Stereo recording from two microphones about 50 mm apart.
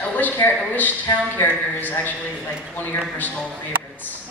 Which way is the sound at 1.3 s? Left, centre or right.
Left.